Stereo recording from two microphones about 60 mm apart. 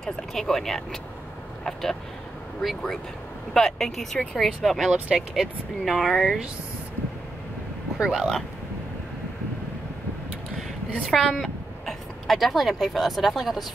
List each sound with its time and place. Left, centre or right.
0.0 s speech: centre
4.9 s speech: centre
5.3 s speech: centre
8.0 s speech: centre
11.1 s speech: centre